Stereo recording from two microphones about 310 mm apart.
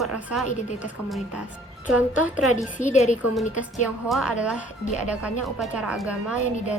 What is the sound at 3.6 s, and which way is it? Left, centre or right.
Speech, centre.